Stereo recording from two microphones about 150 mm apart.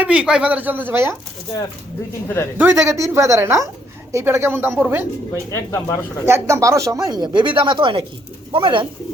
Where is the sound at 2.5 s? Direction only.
15° right (ahead or behind).